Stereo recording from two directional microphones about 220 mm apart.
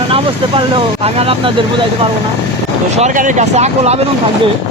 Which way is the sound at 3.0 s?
35° right (ahead or behind).